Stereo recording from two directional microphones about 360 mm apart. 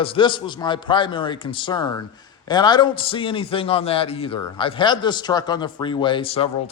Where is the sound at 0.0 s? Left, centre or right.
Centre.